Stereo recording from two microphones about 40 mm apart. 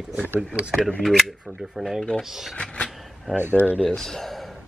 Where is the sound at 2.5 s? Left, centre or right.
Left.